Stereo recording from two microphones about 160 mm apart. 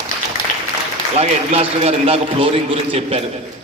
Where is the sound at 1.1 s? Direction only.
40° right (ahead or behind).